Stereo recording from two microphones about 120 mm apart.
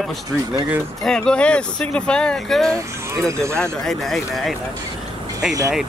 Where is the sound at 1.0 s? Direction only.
5° left (ahead or behind).